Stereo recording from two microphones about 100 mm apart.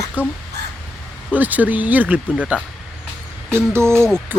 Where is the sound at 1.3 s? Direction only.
15° right (ahead or behind).